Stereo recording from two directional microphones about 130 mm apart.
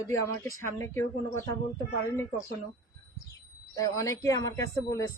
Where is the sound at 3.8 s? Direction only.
25° left (ahead or behind).